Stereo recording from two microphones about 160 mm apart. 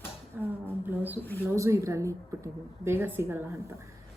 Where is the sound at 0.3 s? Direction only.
15° right (ahead or behind).